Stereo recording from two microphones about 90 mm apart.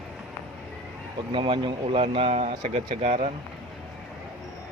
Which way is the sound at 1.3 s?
80° right.